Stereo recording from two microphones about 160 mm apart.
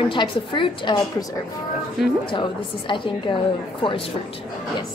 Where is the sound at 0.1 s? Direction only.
30° left (ahead or behind).